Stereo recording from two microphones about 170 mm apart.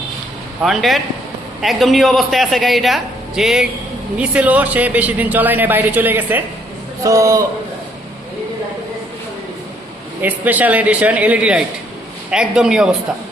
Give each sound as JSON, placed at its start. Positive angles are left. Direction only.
{"t": 0.6, "sound": "a man's voice", "side_deg": 0}
{"t": 10.2, "sound": "a man's voice", "side_deg": -10}